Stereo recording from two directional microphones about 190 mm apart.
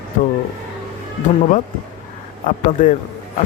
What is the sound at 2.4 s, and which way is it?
Speech, 40° left (ahead or behind).